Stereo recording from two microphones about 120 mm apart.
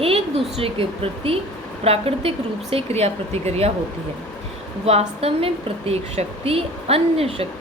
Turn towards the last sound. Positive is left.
turn(degrees=-55)  # may be behind; listen again after turning